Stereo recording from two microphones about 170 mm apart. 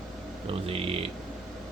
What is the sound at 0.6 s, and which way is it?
Speech, 35° right (ahead or behind).